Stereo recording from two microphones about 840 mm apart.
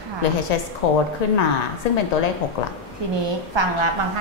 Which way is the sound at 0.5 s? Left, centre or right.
Left.